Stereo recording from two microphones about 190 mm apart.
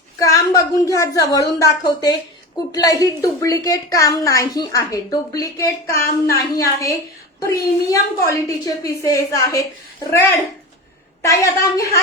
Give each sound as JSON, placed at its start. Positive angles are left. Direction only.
{"t": 0.2, "sound": "a woman's voice", "side_deg": 15}